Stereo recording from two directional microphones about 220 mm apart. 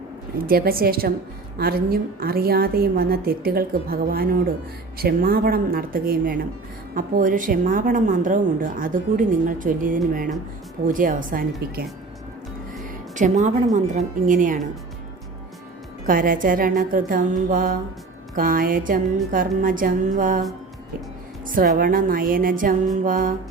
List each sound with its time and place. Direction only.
0.4 s a woman's voice: 40° right (ahead or behind)
13.1 s a woman's voice: 35° right (ahead or behind)
16.0 s a woman's voice: 40° right (ahead or behind)
21.4 s a woman's voice: 40° right (ahead or behind)